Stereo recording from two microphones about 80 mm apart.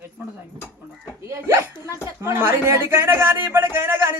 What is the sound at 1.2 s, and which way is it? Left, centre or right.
A man's voice, right.